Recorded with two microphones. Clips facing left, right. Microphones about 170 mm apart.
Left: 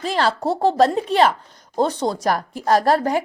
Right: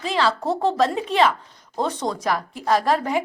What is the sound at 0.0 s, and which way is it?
A woman's voice, 40° left (ahead or behind).